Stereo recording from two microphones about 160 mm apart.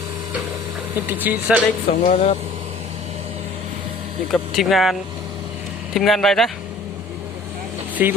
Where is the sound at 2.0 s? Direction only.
45° left (ahead or behind).